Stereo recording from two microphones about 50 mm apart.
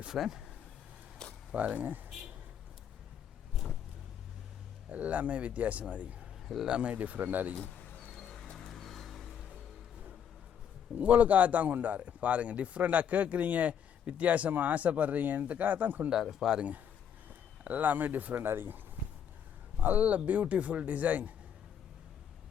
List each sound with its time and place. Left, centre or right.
0.1 s speech: centre
1.2 s a sound: centre
1.7 s speech: right
4.9 s a man's voice: right
7.5 s bird: left
8.1 s a sound: centre
10.9 s speech: right
16.3 s speech: centre
16.6 s a man's voice: right
18.4 s speech: right
19.8 s speech: right